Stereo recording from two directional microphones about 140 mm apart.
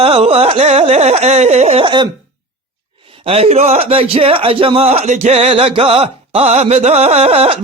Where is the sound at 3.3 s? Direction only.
45° right (ahead or behind).